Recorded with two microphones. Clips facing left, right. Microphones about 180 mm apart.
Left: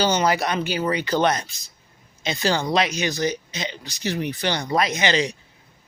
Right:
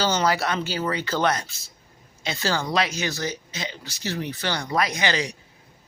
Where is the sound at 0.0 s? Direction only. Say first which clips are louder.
Left 2 dB; 20° left (ahead or behind).